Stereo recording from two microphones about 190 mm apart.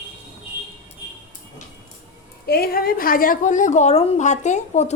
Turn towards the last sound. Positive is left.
turn(degrees=40)  # may be behind; listen again after turning